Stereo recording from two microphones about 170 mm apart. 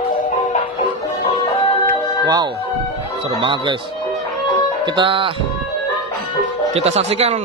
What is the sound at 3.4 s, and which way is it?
Speech, 25° right (ahead or behind).